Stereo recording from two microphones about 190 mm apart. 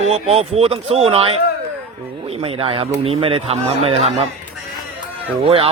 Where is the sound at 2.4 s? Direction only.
30° right (ahead or behind).